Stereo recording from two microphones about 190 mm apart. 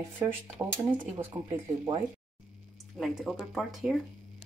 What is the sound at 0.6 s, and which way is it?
Speech, 20° right (ahead or behind).